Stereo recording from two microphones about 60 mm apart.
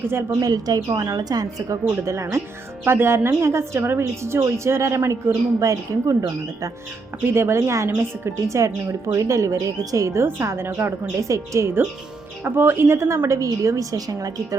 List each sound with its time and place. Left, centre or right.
0.1 s a woman's voice: right
0.3 s a woman's voice: right
1.8 s speech: right
2.8 s a woman's voice: right
5.5 s a woman's voice: right
7.3 s a woman's voice: right
10.1 s a woman's voice: right
12.5 s speech: right
13.2 s a woman's voice: right